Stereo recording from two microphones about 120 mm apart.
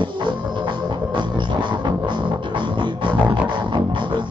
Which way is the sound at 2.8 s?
40° right (ahead or behind).